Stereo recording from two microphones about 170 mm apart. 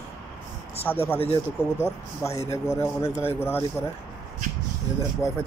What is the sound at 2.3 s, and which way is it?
Speech, 40° left (ahead or behind).